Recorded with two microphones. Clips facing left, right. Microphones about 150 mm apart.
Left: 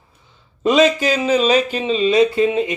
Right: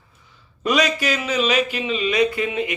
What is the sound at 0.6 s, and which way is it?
Speech, 25° left (ahead or behind).